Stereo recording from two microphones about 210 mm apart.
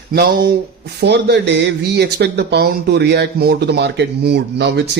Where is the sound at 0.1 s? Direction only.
50° right (ahead or behind).